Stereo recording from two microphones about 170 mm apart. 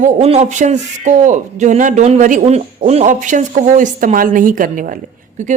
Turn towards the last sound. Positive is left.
turn(degrees=-55)  # may be behind; listen again after turning